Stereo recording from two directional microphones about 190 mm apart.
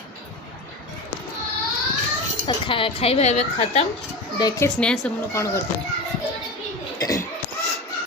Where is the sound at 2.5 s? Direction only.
25° left (ahead or behind).